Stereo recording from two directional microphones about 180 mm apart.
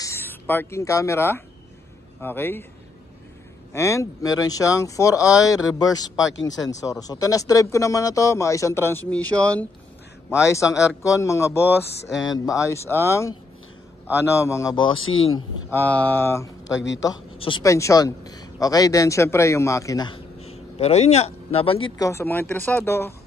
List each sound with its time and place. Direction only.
0.0 s speech: 15° left (ahead or behind)
3.7 s speech: 15° left (ahead or behind)
14.3 s speech: 15° left (ahead or behind)
15.7 s speech: 10° left (ahead or behind)
20.3 s speech: 35° left (ahead or behind); by 23.1 s 15° left (ahead or behind)